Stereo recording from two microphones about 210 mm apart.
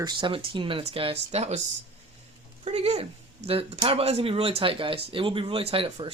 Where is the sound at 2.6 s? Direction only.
30° right (ahead or behind).